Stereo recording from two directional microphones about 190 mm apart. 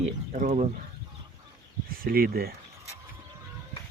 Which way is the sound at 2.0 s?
55° right (ahead or behind).